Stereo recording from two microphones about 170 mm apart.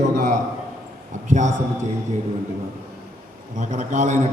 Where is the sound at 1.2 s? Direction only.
45° right (ahead or behind).